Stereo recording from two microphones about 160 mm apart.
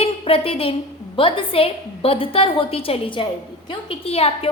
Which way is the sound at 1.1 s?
35° left (ahead or behind).